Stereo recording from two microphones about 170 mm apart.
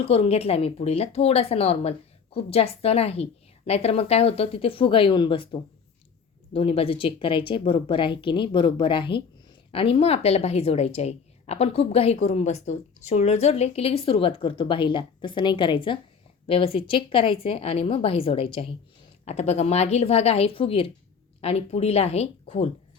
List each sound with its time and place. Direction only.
0.0 s a woman's voice: 35° left (ahead or behind)